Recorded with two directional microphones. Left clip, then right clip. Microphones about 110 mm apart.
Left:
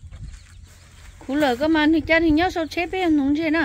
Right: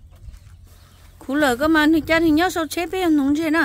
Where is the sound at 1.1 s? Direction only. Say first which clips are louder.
Right 2 dB; 30° right (ahead or behind).